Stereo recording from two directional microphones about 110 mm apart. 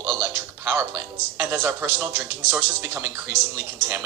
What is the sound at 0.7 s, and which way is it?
Speech, 20° right (ahead or behind).